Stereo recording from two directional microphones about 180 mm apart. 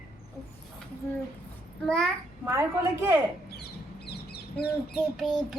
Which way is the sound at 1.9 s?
5° left (ahead or behind).